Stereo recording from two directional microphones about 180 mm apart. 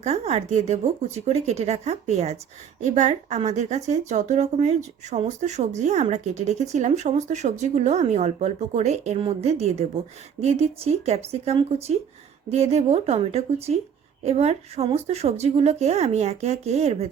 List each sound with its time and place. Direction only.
0.0 s speech: 35° right (ahead or behind)